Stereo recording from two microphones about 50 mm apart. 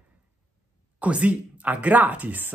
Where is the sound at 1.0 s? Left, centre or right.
Right.